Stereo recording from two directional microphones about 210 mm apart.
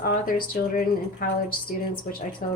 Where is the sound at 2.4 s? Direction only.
40° left (ahead or behind).